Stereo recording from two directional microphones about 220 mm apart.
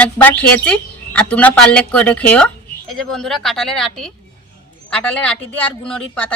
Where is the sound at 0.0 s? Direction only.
5° left (ahead or behind).